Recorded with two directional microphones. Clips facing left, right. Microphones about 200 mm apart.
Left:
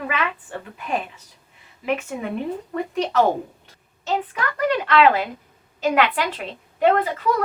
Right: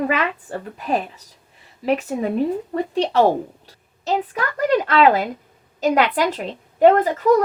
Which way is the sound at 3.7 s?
35° right (ahead or behind).